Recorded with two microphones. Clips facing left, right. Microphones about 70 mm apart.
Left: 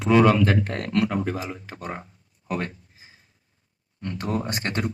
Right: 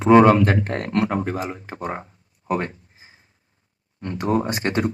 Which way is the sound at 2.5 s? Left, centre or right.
Right.